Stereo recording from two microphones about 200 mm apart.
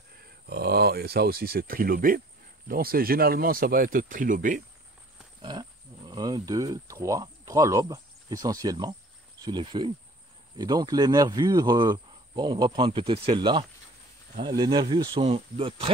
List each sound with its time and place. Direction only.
0.5 s speech: 50° right (ahead or behind)
5.4 s speech: 20° right (ahead or behind)